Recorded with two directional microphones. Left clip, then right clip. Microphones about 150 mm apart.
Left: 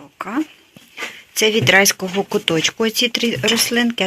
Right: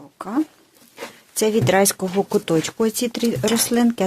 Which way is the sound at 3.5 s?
40° right (ahead or behind).